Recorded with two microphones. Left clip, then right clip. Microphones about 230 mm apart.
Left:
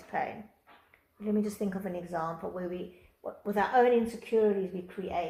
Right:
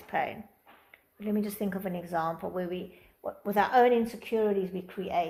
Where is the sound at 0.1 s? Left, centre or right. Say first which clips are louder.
Right 3 dB; right.